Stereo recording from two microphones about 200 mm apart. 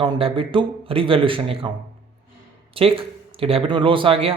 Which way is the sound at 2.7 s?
25° right (ahead or behind).